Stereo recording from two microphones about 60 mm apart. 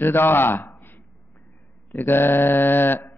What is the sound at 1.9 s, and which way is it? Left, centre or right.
Mantra, left.